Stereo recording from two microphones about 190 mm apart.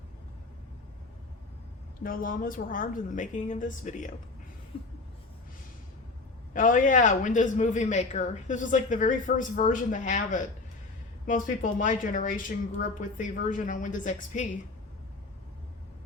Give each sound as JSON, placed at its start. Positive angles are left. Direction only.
{"t": 2.0, "sound": "a woman's voice", "side_deg": 45}
{"t": 6.5, "sound": "a woman's voice", "side_deg": 45}